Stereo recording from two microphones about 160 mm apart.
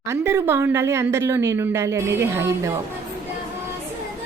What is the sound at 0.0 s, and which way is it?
Speech, 15° right (ahead or behind).